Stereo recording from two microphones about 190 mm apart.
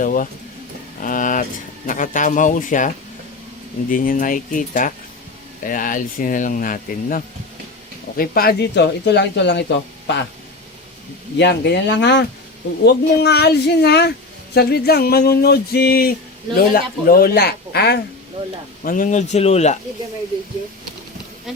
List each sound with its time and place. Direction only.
0.0 s speech: 45° left (ahead or behind); by 10.2 s 65° left (ahead or behind)
11.3 s speech: 60° left (ahead or behind)
18.9 s speech: 40° left (ahead or behind)